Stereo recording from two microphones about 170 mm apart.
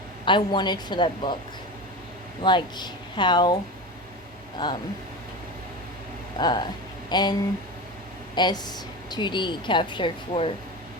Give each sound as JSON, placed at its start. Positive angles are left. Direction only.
{"t": 0.3, "sound": "a woman's voice", "side_deg": 25}
{"t": 2.4, "sound": "a woman's voice", "side_deg": 30}
{"t": 6.4, "sound": "a woman's voice", "side_deg": 25}
{"t": 8.4, "sound": "a woman's voice", "side_deg": 25}